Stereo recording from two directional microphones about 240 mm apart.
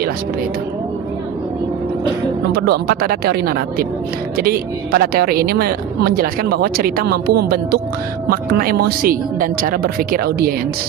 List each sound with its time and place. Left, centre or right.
2.5 s speech: right